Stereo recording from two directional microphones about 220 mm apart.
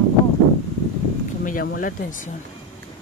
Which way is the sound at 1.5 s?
40° left (ahead or behind).